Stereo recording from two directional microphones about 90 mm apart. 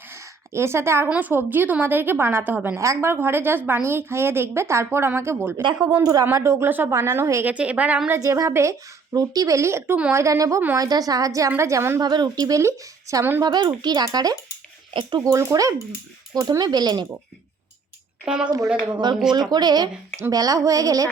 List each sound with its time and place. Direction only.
0.5 s a woman's voice: 30° right (ahead or behind)
1.0 s a woman's voice: 20° right (ahead or behind)
2.7 s a woman's voice: 30° right (ahead or behind)
6.0 s a woman's voice: 45° right (ahead or behind)
6.3 s a woman's voice: 30° right (ahead or behind)
7.4 s a woman's voice: 15° right (ahead or behind)
8.2 s a woman's voice: 35° right (ahead or behind)
9.1 s a woman's voice: 45° right (ahead or behind)
11.9 s a woman's voice: 50° right (ahead or behind); by 13.2 s 35° right (ahead or behind)
13.4 s a woman's voice: 50° right (ahead or behind)
18.3 s a woman's voice: 10° right (ahead or behind)
19.3 s a woman's voice: 50° right (ahead or behind)